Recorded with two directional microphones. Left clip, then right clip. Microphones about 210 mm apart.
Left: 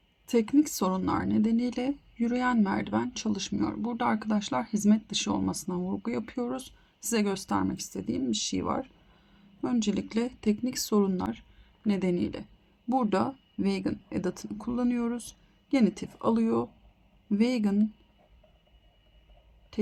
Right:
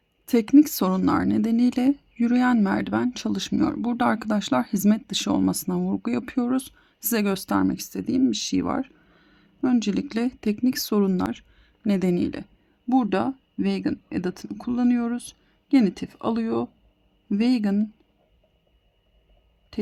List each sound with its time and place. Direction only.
0.3 s speech: 45° right (ahead or behind)
12.9 s speech: 30° right (ahead or behind)